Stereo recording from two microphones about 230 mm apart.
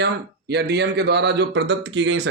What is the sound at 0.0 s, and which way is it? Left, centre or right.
Speech, right.